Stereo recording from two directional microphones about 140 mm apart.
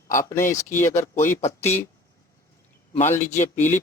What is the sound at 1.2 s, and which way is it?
Speech, 55° left (ahead or behind).